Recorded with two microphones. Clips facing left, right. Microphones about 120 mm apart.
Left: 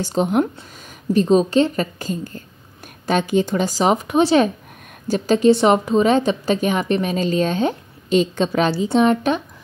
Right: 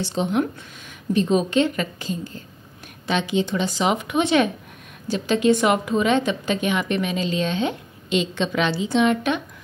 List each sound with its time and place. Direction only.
0.0 s a woman's voice: 45° left (ahead or behind)